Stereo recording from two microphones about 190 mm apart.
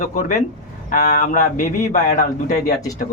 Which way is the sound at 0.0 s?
45° left (ahead or behind).